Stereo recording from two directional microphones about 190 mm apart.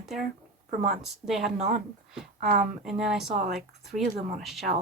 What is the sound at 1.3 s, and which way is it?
Speech, centre (ahead or behind).